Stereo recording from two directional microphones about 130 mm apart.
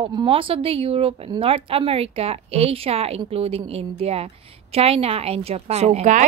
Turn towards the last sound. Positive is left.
turn(degrees=-65)  # may be behind; listen again after turning